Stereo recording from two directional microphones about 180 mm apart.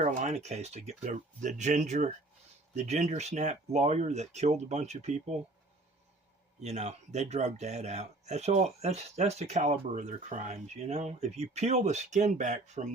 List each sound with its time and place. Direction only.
0.0 s speech: 40° right (ahead or behind)
6.6 s speech: 40° right (ahead or behind)